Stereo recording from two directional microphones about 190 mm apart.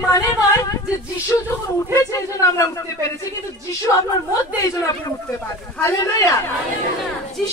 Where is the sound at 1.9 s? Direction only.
15° left (ahead or behind).